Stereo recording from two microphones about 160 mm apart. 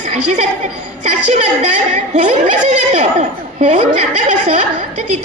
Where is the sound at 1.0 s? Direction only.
45° right (ahead or behind).